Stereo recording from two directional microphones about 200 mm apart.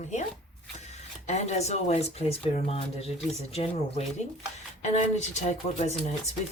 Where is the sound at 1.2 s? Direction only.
35° left (ahead or behind).